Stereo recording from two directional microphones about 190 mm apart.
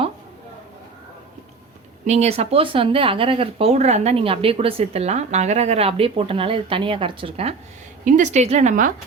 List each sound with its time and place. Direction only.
2.0 s speech: 35° right (ahead or behind)
8.0 s speech: 40° right (ahead or behind)